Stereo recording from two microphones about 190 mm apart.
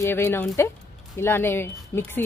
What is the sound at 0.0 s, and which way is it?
A woman's voice, 10° left (ahead or behind).